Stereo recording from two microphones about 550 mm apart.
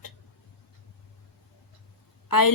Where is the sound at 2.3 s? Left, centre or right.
Left.